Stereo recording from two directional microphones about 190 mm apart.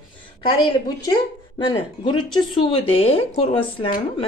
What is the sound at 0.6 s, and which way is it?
Speech, 25° left (ahead or behind).